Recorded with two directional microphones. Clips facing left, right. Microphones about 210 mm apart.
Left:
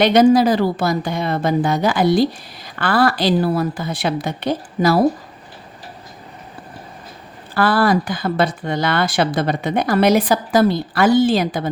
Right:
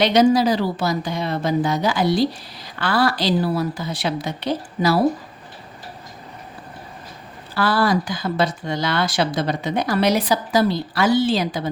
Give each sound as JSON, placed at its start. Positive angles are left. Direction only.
{"t": 0.0, "sound": "a woman's voice", "side_deg": 55}
{"t": 7.5, "sound": "speech", "side_deg": 55}